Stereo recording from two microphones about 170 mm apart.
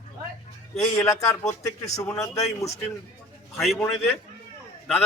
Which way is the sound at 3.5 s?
Centre (ahead or behind).